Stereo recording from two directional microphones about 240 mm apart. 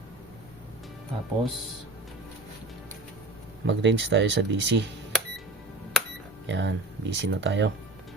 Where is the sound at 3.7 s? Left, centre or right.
Right.